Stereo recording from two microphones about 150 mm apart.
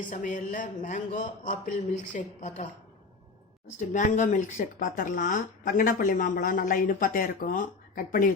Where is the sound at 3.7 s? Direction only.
55° left (ahead or behind).